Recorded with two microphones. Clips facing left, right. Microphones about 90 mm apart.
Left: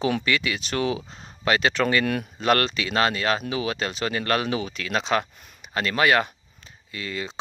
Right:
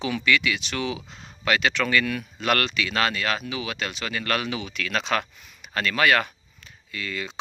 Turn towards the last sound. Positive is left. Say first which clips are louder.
# left 1 dB
turn(degrees=30)  # may be behind; listen again after turning